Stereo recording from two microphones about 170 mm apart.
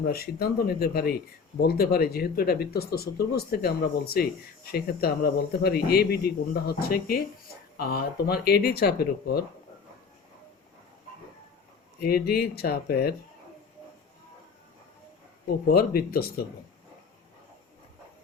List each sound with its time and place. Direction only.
0.0 s speech: 65° left (ahead or behind)
11.9 s speech: 65° left (ahead or behind)
15.4 s speech: 65° left (ahead or behind)